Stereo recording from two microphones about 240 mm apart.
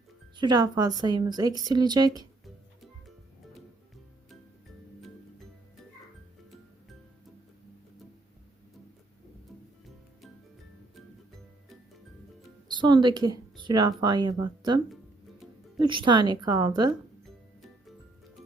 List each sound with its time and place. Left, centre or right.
0.3 s speech: centre
12.7 s speech: centre
15.8 s speech: centre